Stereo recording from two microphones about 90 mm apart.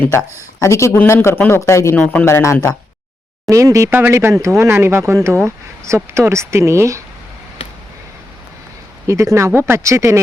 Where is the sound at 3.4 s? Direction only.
35° right (ahead or behind).